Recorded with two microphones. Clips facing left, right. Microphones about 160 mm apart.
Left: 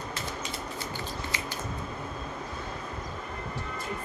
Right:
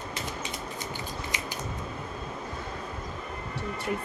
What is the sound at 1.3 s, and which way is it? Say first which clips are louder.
Scissors: even; 20° right (ahead or behind).